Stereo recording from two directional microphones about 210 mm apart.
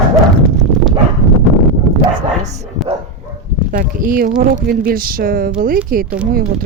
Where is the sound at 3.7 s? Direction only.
40° right (ahead or behind).